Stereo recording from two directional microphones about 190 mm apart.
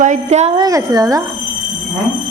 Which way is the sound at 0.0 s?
40° right (ahead or behind).